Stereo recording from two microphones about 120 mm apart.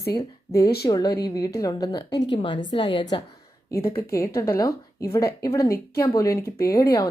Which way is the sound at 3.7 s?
25° left (ahead or behind).